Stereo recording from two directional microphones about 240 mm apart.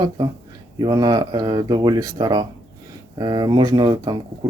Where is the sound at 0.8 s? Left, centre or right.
Centre.